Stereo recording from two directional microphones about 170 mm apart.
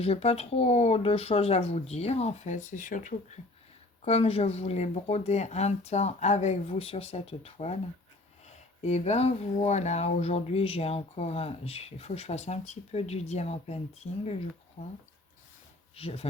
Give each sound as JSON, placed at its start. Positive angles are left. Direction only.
{"t": 0.0, "sound": "speech", "side_deg": 35}
{"t": 4.0, "sound": "speech", "side_deg": 35}
{"t": 16.0, "sound": "speech", "side_deg": 35}